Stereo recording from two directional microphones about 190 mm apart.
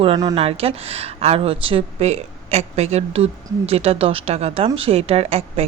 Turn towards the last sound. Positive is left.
turn(degrees=-30)  # may be behind; listen again after turning